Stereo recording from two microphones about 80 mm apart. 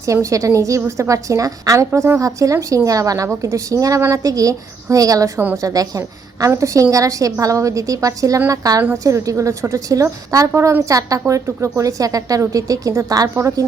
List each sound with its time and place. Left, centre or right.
0.0 s a woman's voice: right